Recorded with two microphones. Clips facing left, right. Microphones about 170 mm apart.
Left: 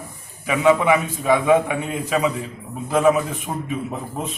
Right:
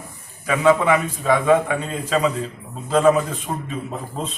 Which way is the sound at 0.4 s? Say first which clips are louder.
Even; 15° left (ahead or behind).